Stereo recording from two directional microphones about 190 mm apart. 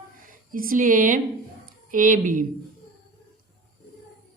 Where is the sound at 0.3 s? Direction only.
45° right (ahead or behind).